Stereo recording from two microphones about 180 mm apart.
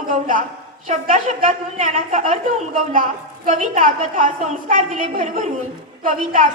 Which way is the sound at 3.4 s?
45° right (ahead or behind).